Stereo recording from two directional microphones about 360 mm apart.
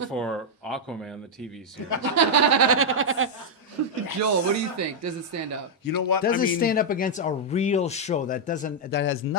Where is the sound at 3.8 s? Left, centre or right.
Right.